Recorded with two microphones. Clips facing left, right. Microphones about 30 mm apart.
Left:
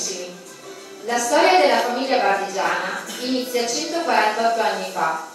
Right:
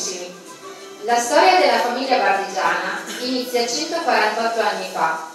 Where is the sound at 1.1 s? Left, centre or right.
Centre.